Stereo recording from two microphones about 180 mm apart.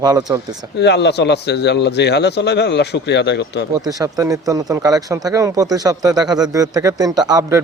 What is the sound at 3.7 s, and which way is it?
Speech, 20° right (ahead or behind).